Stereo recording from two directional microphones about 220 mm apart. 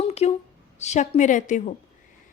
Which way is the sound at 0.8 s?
30° left (ahead or behind).